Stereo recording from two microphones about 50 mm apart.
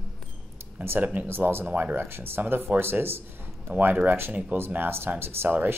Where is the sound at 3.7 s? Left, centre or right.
Right.